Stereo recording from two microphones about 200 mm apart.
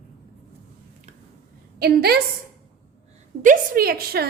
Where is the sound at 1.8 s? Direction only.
50° right (ahead or behind).